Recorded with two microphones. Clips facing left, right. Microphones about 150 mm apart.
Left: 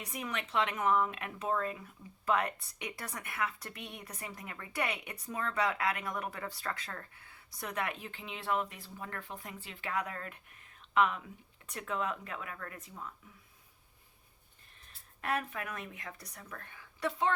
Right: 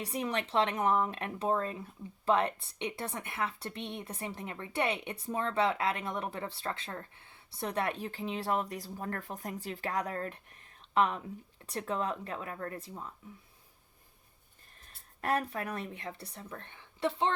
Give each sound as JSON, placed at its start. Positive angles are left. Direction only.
{"t": 0.0, "sound": "speech", "side_deg": -30}
{"t": 15.2, "sound": "speech", "side_deg": -35}